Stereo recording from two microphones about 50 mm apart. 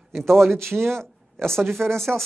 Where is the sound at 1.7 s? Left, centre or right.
Centre.